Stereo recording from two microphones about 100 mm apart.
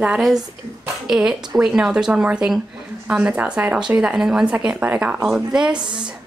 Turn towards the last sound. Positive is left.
turn(degrees=-50)  # may be behind; listen again after turning